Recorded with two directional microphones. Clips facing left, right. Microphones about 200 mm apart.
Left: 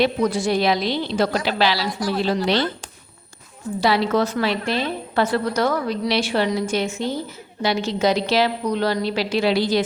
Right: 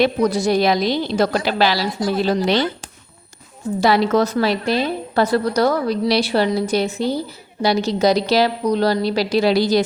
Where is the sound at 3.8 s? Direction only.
45° right (ahead or behind).